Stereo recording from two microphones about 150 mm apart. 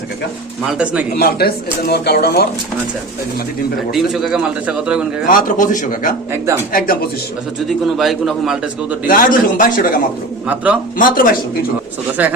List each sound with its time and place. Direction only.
0.7 s speech: 5° right (ahead or behind)
1.1 s speech: 90° left
3.9 s speech: centre (ahead or behind)
5.3 s a man's voice: 60° left (ahead or behind)
7.9 s speech: centre (ahead or behind)
9.0 s a man's voice: 65° left (ahead or behind)
10.4 s speech: 10° right (ahead or behind)
10.9 s speech: 65° left (ahead or behind)
12.2 s speech: 10° right (ahead or behind)